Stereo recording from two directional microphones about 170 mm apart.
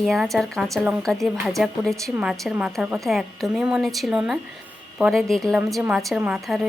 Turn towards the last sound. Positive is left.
turn(degrees=0)  # may be behind; listen again after turning